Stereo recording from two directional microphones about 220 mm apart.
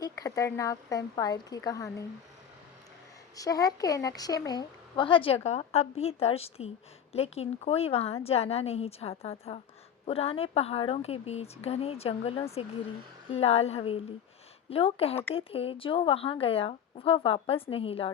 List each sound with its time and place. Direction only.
0.0 s speech: 15° left (ahead or behind)
3.3 s speech: 15° left (ahead or behind)